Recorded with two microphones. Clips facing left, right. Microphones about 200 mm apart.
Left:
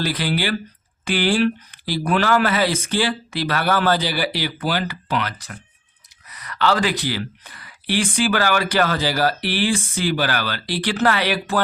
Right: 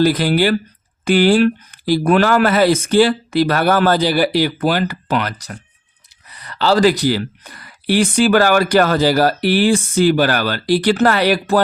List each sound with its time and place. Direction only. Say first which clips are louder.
0.0 s speech: right 9 dB; 45° right (ahead or behind)
6.3 s speech: right 5 dB; 30° right (ahead or behind)